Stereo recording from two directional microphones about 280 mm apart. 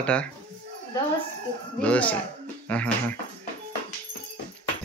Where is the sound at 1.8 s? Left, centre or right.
Centre.